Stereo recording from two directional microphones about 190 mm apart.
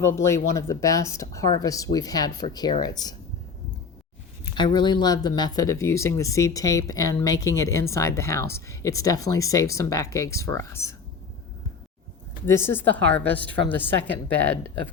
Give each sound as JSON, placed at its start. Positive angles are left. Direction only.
{"t": 0.0, "sound": "speech", "side_deg": 15}
{"t": 4.5, "sound": "speech", "side_deg": 25}
{"t": 12.5, "sound": "speech", "side_deg": 10}